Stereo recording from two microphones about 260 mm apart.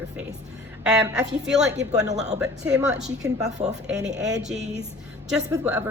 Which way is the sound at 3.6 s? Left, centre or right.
Right.